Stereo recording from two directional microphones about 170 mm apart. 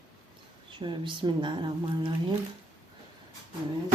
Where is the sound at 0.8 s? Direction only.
25° right (ahead or behind).